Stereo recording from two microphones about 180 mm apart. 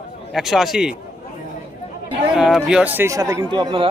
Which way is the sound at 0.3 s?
Centre (ahead or behind).